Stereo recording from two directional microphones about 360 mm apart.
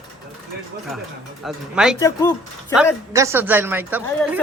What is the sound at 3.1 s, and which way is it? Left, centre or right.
A woman's voice, centre.